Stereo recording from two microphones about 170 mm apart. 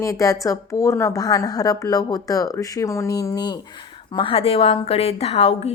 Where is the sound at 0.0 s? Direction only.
20° left (ahead or behind).